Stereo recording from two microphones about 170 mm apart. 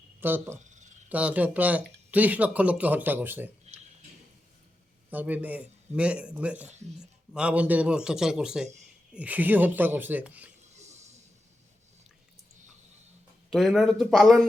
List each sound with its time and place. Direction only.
0.2 s a man's voice: 10° right (ahead or behind)
0.6 s a sound: 45° right (ahead or behind)
1.1 s a man's voice: 10° right (ahead or behind)
5.1 s a man's voice: 10° right (ahead or behind)
10.8 s a sound: 40° right (ahead or behind)
13.5 s speech: centre (ahead or behind)